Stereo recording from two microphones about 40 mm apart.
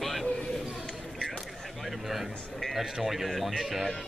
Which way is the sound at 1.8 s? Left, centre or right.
Centre.